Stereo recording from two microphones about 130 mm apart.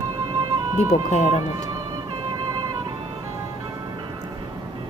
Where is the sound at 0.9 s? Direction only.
65° left (ahead or behind).